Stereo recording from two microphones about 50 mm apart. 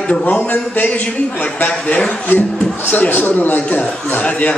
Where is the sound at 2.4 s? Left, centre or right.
Centre.